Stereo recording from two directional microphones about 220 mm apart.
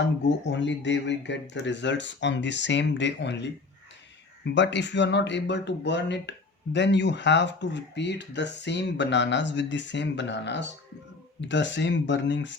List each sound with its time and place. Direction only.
0.4 s speech: 55° left (ahead or behind)
4.5 s speech: 55° left (ahead or behind)